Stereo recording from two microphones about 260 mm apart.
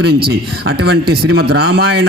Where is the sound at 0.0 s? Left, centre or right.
Right.